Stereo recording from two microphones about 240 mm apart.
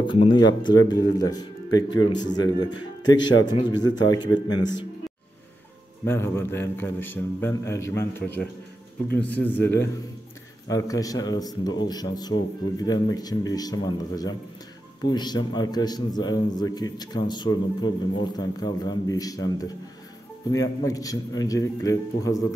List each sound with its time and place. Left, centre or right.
0.0 s a man's voice: left
6.0 s a man's voice: centre